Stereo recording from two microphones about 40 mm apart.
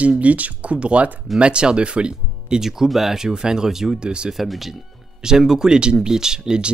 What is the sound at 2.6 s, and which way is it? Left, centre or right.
Speech, centre.